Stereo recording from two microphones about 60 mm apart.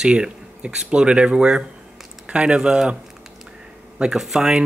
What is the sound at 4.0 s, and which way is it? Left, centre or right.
Speech, centre.